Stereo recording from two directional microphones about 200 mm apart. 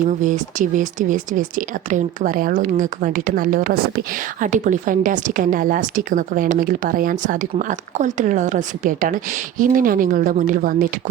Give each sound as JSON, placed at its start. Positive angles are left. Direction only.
{"t": 0.2, "sound": "speech", "side_deg": -40}